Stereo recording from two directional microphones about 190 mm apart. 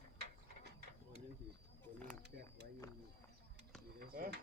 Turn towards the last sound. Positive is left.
turn(degrees=-50)  # may be behind; listen again after turning